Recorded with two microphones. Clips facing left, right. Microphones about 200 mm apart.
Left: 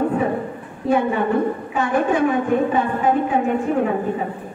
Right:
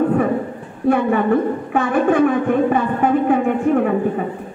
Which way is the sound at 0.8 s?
55° right (ahead or behind).